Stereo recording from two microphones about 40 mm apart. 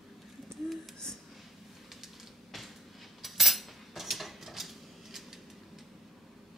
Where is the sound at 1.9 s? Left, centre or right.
Centre.